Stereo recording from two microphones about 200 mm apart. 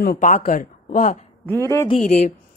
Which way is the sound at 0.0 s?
45° left (ahead or behind).